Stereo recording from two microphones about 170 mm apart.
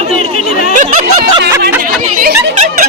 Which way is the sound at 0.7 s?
45° right (ahead or behind).